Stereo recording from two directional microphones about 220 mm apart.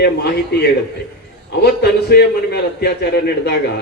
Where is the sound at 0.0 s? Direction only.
50° left (ahead or behind).